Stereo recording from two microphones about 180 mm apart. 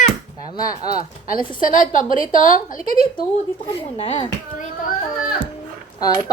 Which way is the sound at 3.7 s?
30° left (ahead or behind).